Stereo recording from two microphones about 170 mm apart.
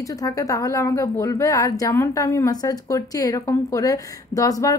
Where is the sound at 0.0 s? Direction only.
20° left (ahead or behind).